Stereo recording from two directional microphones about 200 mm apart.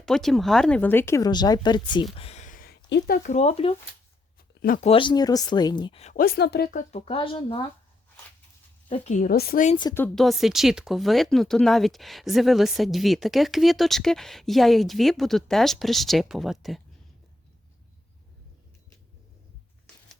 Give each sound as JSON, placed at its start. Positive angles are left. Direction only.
{"t": 0.0, "sound": "speech", "side_deg": 0}
{"t": 2.1, "sound": "a sound", "side_deg": 30}
{"t": 3.3, "sound": "a woman's voice", "side_deg": 30}
{"t": 4.6, "sound": "speech", "side_deg": 45}
{"t": 4.9, "sound": "speech", "side_deg": 25}
{"t": 6.1, "sound": "speech", "side_deg": 50}
{"t": 6.9, "sound": "speech", "side_deg": 30}
{"t": 8.9, "sound": "a woman's voice", "side_deg": 35}
{"t": 9.9, "sound": "speech", "side_deg": 5}